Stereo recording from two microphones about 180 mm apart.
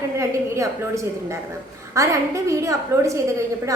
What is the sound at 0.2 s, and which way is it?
A woman's voice, 15° right (ahead or behind).